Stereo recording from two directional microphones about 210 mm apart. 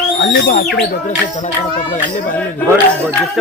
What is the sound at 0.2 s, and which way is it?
Speech, 50° left (ahead or behind).